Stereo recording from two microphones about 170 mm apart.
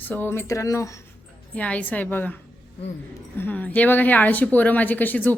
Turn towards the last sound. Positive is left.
turn(degrees=10)  # may be behind; listen again after turning